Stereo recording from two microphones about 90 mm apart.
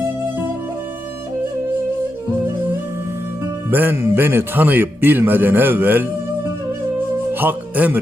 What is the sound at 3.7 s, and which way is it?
A man's voice, 20° right (ahead or behind).